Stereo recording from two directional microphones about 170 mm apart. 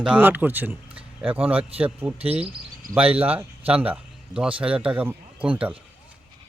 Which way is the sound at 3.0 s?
35° right (ahead or behind).